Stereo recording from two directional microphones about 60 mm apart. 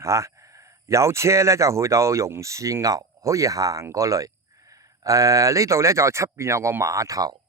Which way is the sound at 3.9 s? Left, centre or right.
Right.